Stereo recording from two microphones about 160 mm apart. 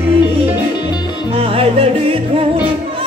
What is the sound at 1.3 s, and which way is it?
Music, 35° right (ahead or behind).